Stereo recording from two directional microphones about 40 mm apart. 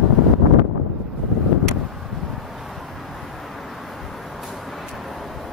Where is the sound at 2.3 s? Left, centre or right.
Centre.